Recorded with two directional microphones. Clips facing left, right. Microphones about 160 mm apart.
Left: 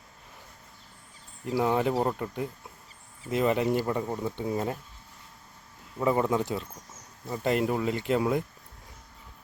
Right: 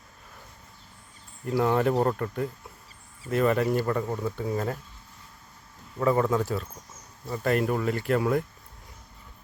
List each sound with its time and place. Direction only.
1.5 s speech: 10° left (ahead or behind)
6.0 s speech: 15° left (ahead or behind)